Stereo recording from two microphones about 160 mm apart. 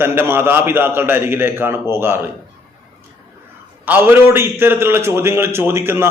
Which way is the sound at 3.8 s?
10° right (ahead or behind).